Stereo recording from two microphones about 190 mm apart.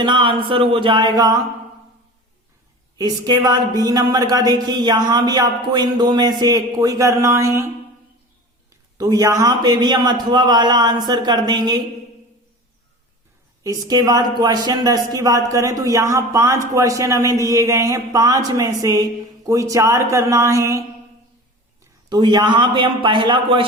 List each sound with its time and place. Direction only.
0.0 s speech: 25° right (ahead or behind)
3.0 s speech: 20° right (ahead or behind)
9.0 s speech: 20° right (ahead or behind)
13.7 s speech: 20° right (ahead or behind)
22.1 s speech: 20° right (ahead or behind)